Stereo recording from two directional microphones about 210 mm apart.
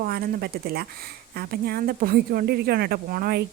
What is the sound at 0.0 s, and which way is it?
Speech, 45° right (ahead or behind).